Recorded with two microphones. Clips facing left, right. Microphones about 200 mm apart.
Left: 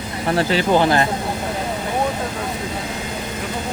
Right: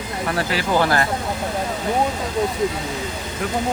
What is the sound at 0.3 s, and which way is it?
Speech, 25° left (ahead or behind).